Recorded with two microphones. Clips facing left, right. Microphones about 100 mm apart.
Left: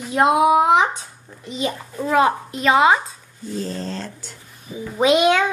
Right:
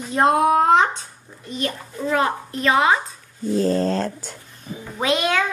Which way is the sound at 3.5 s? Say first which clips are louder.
Right 8 dB; 45° right (ahead or behind).